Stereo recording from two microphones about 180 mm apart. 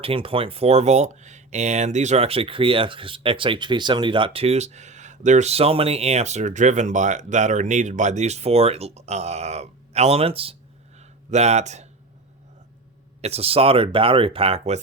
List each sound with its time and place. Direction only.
0.0 s speech: 30° right (ahead or behind)
13.2 s speech: 35° right (ahead or behind)